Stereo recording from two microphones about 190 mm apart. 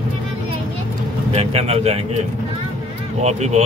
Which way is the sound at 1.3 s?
30° right (ahead or behind).